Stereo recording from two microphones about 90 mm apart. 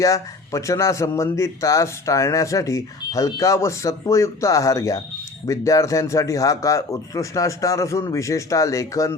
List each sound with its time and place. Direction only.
0.0 s a man's voice: 35° left (ahead or behind)